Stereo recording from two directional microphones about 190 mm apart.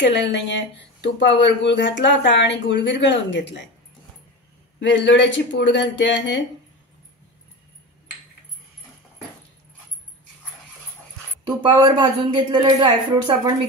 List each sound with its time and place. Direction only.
0.0 s speech: 70° left (ahead or behind)
4.7 s speech: 70° left (ahead or behind)
11.4 s a woman's voice: 25° right (ahead or behind)